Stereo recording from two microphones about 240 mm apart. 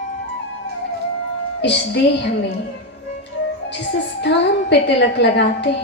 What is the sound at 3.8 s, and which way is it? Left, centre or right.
A woman's voice, left.